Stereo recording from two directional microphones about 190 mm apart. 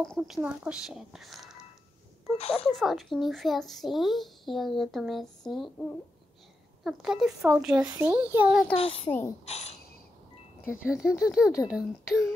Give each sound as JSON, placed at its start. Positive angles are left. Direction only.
{"t": 0.0, "sound": "speech", "side_deg": 0}
{"t": 6.8, "sound": "a child's voice", "side_deg": 0}
{"t": 8.7, "sound": "a child's voice", "side_deg": 30}
{"t": 10.8, "sound": "speech", "side_deg": -5}